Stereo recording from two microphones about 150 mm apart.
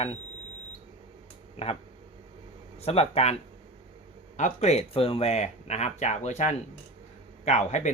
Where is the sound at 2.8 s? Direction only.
40° left (ahead or behind).